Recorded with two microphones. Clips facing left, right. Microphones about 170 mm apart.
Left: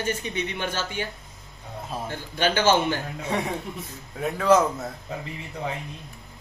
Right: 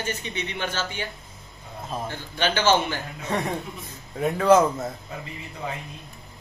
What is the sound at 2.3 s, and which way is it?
Speech, 45° left (ahead or behind).